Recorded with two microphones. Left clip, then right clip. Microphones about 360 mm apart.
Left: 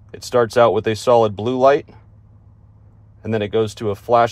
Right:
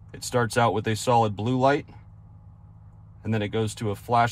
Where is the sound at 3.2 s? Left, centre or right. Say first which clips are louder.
Left 9 dB; left.